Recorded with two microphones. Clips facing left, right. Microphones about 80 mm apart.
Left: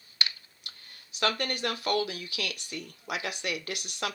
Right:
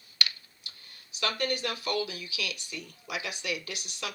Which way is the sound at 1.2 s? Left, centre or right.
Left.